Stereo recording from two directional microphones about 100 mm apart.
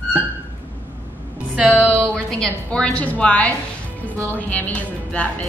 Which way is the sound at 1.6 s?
15° right (ahead or behind).